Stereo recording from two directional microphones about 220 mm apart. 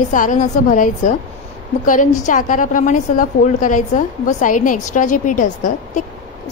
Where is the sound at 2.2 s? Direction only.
35° left (ahead or behind).